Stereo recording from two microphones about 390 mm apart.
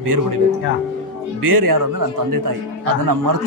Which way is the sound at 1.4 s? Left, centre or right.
Right.